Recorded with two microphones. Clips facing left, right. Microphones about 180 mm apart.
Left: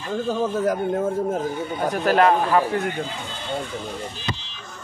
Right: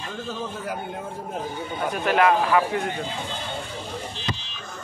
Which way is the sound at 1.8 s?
40° left (ahead or behind).